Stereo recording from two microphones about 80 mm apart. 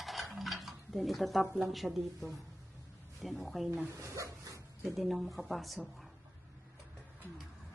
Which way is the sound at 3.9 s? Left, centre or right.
Right.